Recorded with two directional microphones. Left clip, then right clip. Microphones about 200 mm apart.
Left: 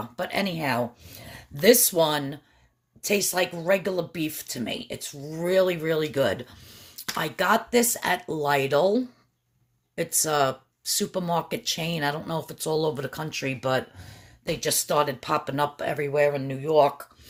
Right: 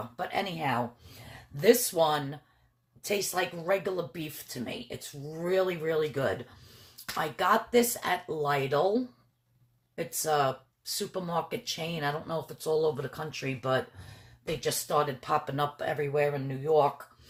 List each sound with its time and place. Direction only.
0.2 s speech: 50° left (ahead or behind)